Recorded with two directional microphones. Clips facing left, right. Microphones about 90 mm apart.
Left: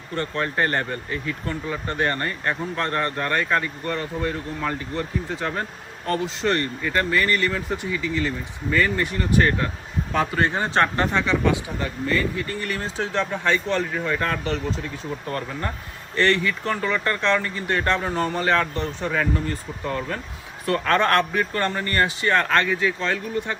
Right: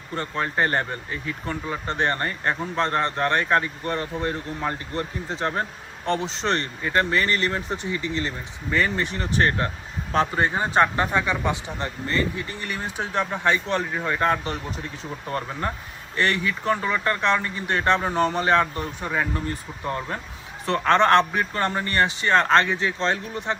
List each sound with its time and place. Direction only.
0.2 s speech: 15° right (ahead or behind)